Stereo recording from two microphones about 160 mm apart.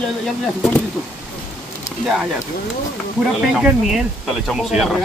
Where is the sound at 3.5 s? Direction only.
Centre (ahead or behind).